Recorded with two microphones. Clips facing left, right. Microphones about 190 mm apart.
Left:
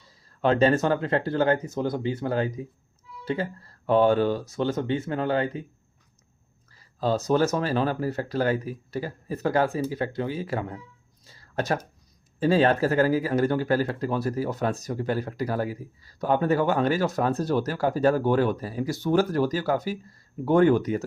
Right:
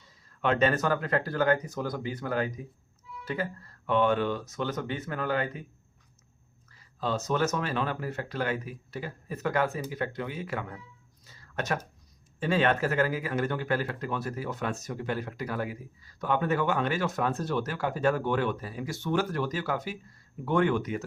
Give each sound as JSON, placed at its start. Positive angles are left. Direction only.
{"t": 0.4, "sound": "speech", "side_deg": 35}
{"t": 6.7, "sound": "speech", "side_deg": 35}
{"t": 11.3, "sound": "a sound", "side_deg": 35}
{"t": 12.4, "sound": "speech", "side_deg": 35}